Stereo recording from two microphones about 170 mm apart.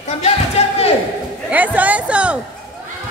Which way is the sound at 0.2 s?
40° left (ahead or behind).